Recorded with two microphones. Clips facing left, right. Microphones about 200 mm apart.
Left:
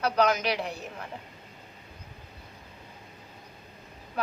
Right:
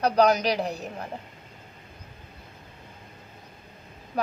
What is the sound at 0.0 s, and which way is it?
A woman's voice, 35° right (ahead or behind).